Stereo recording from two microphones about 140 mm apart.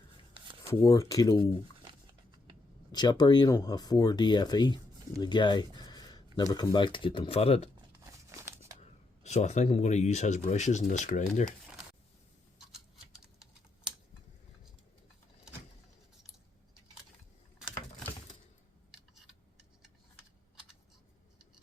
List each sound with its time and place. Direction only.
0.6 s speech: 20° left (ahead or behind)
2.9 s speech: 30° left (ahead or behind); by 7.7 s 45° left (ahead or behind)
8.3 s a sound: 20° right (ahead or behind)
8.8 s speech: 55° left (ahead or behind)